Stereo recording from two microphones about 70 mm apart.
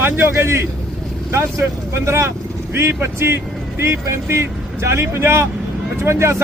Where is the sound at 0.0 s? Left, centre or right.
Right.